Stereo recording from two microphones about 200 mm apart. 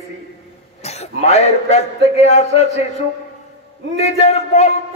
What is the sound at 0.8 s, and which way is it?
A man's voice, 35° left (ahead or behind).